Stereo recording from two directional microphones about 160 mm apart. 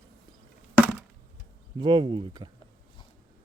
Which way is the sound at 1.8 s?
30° right (ahead or behind).